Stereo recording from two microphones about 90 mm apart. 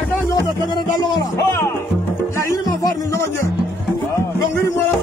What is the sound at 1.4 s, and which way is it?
Speech, 35° left (ahead or behind).